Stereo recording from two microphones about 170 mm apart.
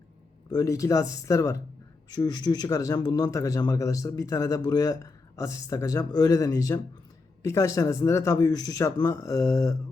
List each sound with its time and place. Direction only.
0.5 s speech: 20° left (ahead or behind)